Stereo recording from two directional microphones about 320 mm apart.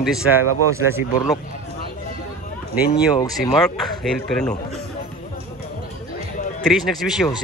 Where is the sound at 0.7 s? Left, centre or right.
Centre.